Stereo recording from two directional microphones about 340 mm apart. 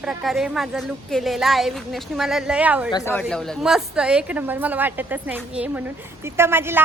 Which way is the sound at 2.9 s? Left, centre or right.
Centre.